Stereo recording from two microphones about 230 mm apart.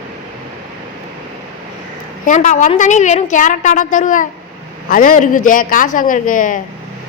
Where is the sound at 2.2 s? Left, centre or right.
Left.